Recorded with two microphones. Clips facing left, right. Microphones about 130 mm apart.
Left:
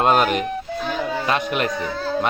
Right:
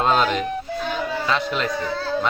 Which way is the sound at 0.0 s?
10° left (ahead or behind).